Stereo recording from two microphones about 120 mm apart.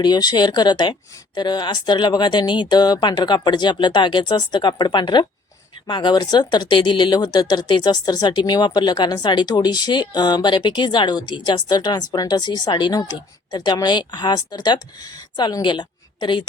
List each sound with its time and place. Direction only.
0.0 s a woman's voice: 35° left (ahead or behind)